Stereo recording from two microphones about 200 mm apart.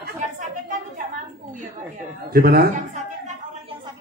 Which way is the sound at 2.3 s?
50° right (ahead or behind).